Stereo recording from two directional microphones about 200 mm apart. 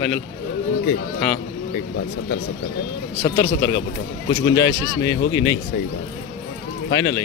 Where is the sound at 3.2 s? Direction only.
55° left (ahead or behind).